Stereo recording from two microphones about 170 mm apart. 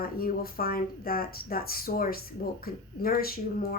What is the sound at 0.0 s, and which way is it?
Speech, 60° left (ahead or behind).